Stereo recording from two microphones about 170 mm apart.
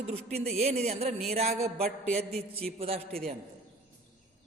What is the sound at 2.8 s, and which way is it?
Speech, 35° right (ahead or behind).